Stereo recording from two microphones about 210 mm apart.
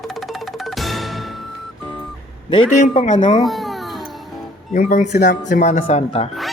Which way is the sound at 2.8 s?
25° left (ahead or behind).